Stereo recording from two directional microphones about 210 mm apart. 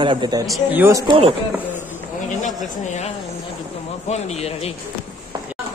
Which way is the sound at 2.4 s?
35° left (ahead or behind).